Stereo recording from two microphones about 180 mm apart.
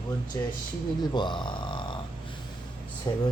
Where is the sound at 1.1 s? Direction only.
25° left (ahead or behind).